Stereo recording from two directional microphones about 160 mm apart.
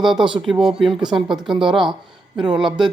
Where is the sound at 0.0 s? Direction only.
Centre (ahead or behind).